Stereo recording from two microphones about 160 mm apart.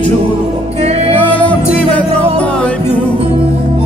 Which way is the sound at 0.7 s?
40° right (ahead or behind).